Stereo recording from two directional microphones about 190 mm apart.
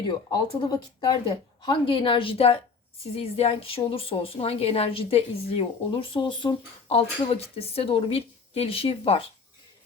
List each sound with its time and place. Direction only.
0.3 s a woman's voice: 20° left (ahead or behind)